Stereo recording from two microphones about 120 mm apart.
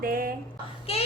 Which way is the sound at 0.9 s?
50° left (ahead or behind).